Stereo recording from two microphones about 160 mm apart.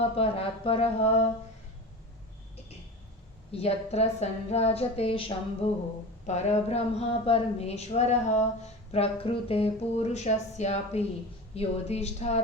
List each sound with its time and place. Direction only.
0.2 s speech: 35° left (ahead or behind)
3.5 s a woman's voice: 40° left (ahead or behind)